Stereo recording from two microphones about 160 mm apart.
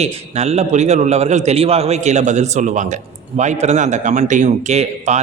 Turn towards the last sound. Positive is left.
turn(degrees=-45)  # may be behind; listen again after turning